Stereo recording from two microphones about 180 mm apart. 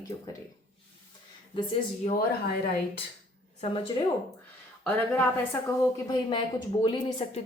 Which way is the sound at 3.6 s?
35° left (ahead or behind).